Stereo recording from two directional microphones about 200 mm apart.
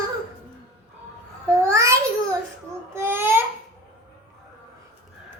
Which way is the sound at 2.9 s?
10° right (ahead or behind).